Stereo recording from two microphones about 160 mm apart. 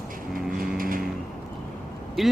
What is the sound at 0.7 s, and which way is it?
Vehicle, 60° right (ahead or behind).